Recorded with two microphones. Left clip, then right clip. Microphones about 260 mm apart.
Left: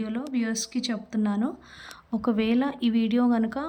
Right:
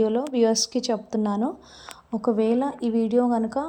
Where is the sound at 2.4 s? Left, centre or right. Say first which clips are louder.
Right 2 dB; centre.